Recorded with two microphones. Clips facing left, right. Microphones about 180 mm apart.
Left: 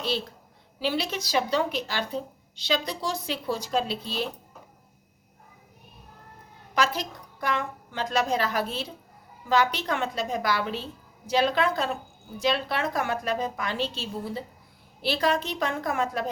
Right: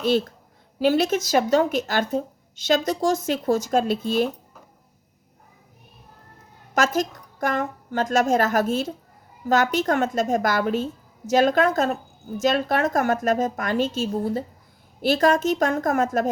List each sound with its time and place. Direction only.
0.0 s speech: 50° right (ahead or behind)
6.7 s speech: 45° right (ahead or behind)